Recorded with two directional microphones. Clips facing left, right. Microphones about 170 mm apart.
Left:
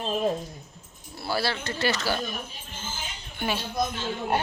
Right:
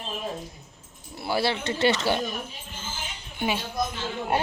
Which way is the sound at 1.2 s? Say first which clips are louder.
Right 3 dB; 20° right (ahead or behind).